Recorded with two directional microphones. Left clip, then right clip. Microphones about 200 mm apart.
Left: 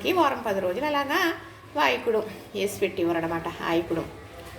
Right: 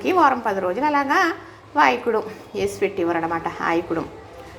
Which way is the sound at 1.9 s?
15° right (ahead or behind).